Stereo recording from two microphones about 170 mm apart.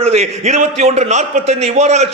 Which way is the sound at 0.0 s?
40° right (ahead or behind).